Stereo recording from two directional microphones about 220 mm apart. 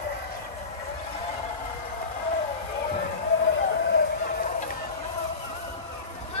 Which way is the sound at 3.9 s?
45° left (ahead or behind).